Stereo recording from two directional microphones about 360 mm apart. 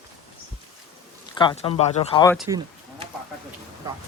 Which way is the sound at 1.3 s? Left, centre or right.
Centre.